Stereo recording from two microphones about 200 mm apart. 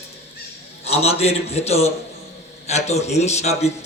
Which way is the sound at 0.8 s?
30° left (ahead or behind).